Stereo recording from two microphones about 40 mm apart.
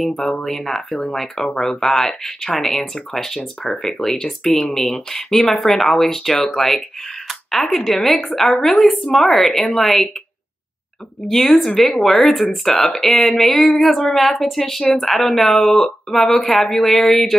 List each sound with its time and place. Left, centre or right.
0.2 s speech: centre
0.8 s a woman's voice: centre
11.2 s a woman's voice: centre